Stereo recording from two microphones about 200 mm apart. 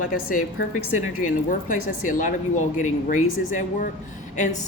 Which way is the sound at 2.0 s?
40° left (ahead or behind).